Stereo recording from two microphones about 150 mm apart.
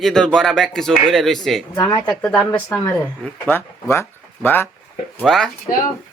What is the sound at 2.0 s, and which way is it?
Speech, 5° left (ahead or behind).